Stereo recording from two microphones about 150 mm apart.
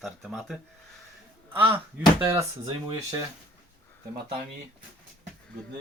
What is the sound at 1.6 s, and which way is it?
Speech, 15° right (ahead or behind).